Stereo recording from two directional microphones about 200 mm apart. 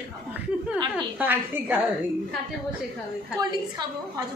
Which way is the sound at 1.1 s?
10° right (ahead or behind).